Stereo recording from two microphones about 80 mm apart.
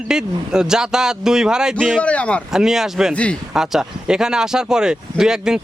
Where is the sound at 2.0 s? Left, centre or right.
Centre.